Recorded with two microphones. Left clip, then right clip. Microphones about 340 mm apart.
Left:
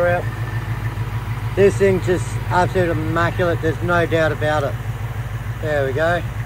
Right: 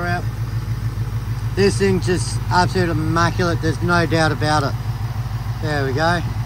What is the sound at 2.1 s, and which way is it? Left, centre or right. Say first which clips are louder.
Speech: even; centre.